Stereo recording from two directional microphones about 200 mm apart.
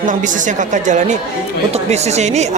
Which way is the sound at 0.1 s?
40° right (ahead or behind).